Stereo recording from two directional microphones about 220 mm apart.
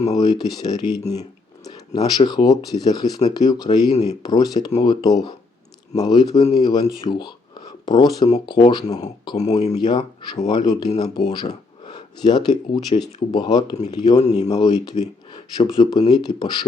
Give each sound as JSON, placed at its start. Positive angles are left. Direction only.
{"t": 0.1, "sound": "speech", "side_deg": 15}
{"t": 14.2, "sound": "speech", "side_deg": 30}
{"t": 14.4, "sound": "speech", "side_deg": 15}